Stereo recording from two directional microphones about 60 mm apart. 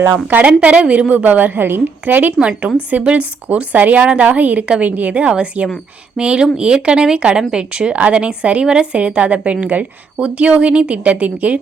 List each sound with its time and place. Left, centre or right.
0.3 s speech: right